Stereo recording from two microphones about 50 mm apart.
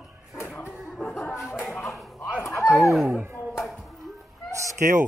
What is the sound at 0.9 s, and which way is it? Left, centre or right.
Chuckle, centre.